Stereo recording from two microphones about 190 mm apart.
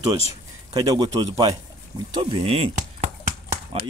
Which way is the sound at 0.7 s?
20° right (ahead or behind).